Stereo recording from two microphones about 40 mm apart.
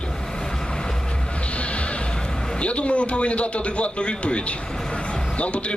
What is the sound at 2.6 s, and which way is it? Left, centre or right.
Speech, left.